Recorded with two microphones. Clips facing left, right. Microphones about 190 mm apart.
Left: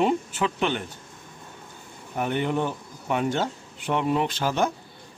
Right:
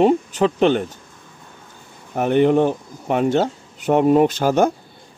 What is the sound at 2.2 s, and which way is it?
Speech, 45° right (ahead or behind).